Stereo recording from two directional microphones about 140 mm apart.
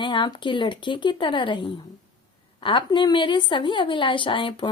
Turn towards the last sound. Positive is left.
turn(degrees=35)  # may be behind; listen again after turning